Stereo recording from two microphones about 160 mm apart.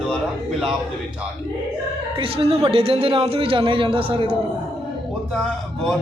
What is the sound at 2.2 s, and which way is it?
Speech, 35° right (ahead or behind).